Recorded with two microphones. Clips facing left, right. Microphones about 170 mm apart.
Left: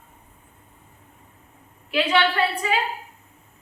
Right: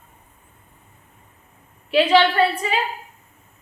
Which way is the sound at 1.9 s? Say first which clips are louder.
Right 6 dB; 25° right (ahead or behind).